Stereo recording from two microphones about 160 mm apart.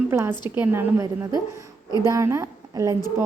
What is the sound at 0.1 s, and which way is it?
A woman's voice, 15° right (ahead or behind).